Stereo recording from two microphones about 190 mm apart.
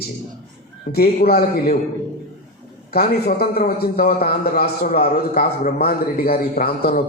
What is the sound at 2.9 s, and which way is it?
A man's voice, 55° left (ahead or behind).